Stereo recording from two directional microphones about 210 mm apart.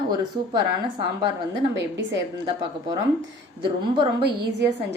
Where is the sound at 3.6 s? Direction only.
25° right (ahead or behind).